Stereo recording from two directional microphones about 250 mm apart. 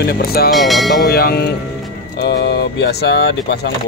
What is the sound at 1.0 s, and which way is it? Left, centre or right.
Speech, left.